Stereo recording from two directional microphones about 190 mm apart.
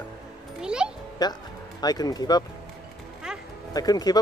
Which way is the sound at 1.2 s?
20° left (ahead or behind).